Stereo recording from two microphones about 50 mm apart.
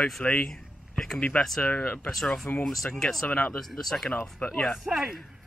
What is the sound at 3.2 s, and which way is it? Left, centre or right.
Speech, left.